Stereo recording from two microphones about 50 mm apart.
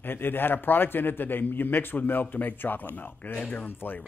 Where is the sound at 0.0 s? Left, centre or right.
Left.